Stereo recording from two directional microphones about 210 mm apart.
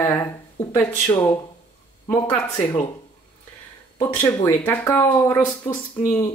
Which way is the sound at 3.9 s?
10° left (ahead or behind).